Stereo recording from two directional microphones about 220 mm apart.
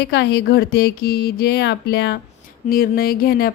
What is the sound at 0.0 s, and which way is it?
Speech, 50° left (ahead or behind).